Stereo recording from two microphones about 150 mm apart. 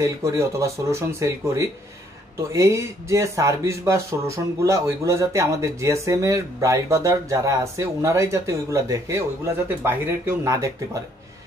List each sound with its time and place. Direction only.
0.0 s speech: 20° right (ahead or behind)